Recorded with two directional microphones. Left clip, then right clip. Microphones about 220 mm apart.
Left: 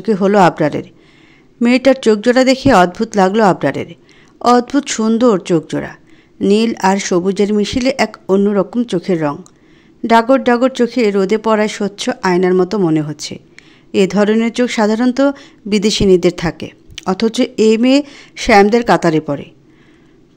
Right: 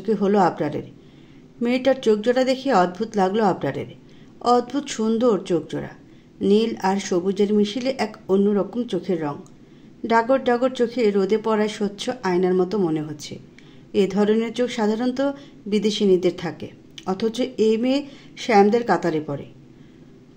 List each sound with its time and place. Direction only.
0.0 s speech: 45° left (ahead or behind)